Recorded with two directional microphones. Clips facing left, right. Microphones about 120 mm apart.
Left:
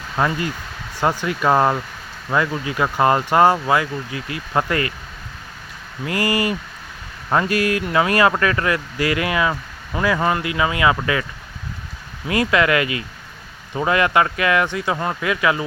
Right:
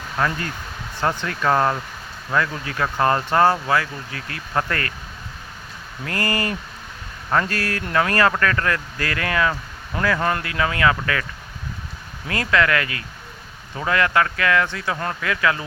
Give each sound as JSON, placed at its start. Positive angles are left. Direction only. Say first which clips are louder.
{"t": 0.2, "sound": "speech", "louder": "left 3 dB", "side_deg": 15}
{"t": 6.1, "sound": "speech", "louder": "left 4 dB", "side_deg": 10}
{"t": 12.3, "sound": "speech", "louder": "left 3 dB", "side_deg": 15}